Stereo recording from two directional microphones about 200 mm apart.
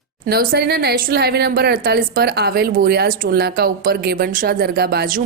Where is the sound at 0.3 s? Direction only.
50° right (ahead or behind).